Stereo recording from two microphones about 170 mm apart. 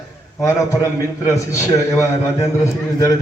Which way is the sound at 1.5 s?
15° left (ahead or behind).